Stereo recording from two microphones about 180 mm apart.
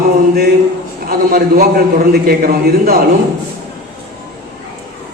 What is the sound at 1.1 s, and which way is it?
A man's voice, 55° right (ahead or behind).